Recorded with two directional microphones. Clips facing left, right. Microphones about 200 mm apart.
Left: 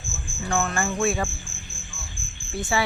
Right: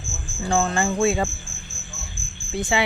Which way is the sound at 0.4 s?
30° right (ahead or behind).